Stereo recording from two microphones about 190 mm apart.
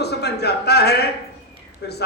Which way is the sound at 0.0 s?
60° left (ahead or behind).